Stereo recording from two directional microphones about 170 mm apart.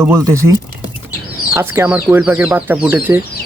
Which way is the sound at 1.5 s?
15° right (ahead or behind).